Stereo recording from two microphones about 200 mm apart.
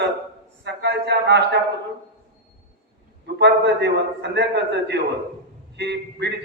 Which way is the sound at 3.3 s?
60° right (ahead or behind).